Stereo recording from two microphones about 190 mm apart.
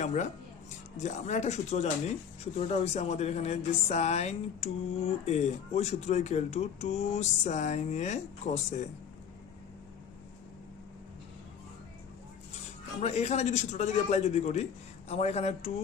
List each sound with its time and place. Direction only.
0.0 s a woman's voice: 40° left (ahead or behind)
13.0 s a woman's voice: 35° left (ahead or behind)